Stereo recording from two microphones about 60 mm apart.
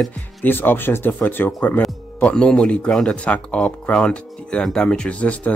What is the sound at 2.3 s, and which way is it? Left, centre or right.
Speech, centre.